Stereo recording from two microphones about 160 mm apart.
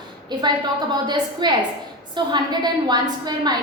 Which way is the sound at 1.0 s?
25° right (ahead or behind).